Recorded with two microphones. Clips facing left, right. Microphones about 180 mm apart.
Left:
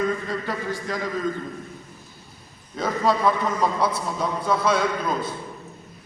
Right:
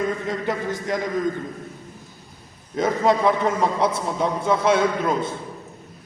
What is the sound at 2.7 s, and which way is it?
A man's voice, 20° right (ahead or behind).